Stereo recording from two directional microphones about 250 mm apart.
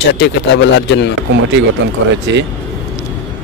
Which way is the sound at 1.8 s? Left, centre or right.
Right.